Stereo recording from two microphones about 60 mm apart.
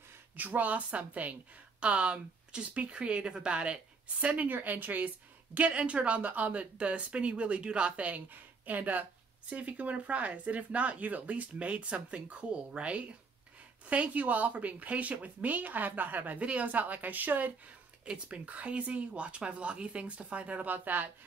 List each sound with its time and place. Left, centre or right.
0.4 s speech: right
18.0 s speech: centre